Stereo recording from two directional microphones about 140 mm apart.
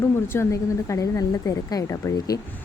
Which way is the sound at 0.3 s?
20° left (ahead or behind).